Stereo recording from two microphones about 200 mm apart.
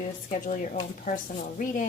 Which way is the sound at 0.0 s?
40° left (ahead or behind).